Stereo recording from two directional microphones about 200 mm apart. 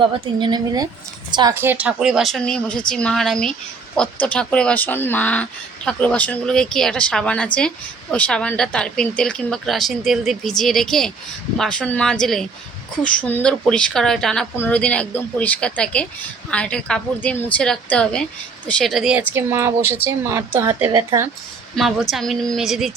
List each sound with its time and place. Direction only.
0.3 s speech: 20° right (ahead or behind)
1.5 s a woman's voice: 10° right (ahead or behind)
21.8 s speech: centre (ahead or behind)